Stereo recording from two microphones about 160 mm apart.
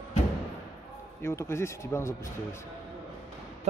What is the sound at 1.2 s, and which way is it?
Speech, 15° left (ahead or behind).